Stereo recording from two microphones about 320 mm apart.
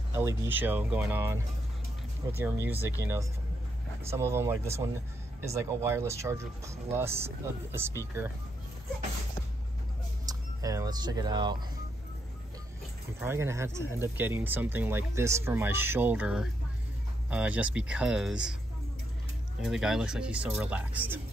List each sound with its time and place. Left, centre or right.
0.1 s speech: centre
10.2 s speech: centre
13.2 s speech: centre
19.6 s speech: centre